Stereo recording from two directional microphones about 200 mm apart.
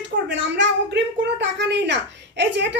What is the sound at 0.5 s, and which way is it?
A child's voice, 60° right (ahead or behind).